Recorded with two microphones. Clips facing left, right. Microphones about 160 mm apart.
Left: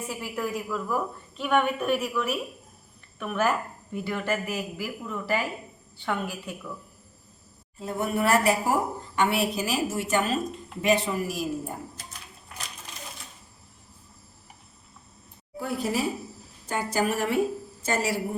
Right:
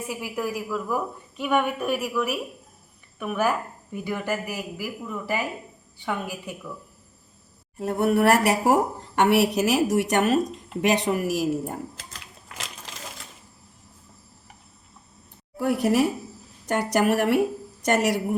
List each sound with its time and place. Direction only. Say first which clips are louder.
0.1 s a woman's voice: right 2 dB; 10° right (ahead or behind)
7.8 s a woman's voice: right 6 dB; 65° right (ahead or behind)
11.9 s typewriter: right 1 dB; 90° right
15.5 s a woman's voice: right 7 dB; 70° right (ahead or behind)